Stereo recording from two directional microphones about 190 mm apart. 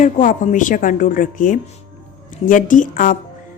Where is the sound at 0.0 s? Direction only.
40° left (ahead or behind).